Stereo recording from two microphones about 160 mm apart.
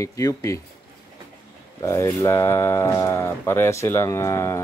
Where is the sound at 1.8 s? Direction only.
15° left (ahead or behind).